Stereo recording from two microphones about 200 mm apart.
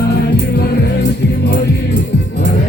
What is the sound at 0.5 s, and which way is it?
Music, 55° left (ahead or behind).